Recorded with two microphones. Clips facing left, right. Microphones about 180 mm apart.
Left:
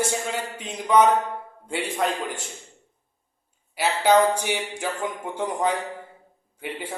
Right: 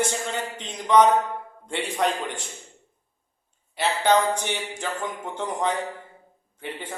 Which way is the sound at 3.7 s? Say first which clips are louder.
Left 2 dB; 10° left (ahead or behind).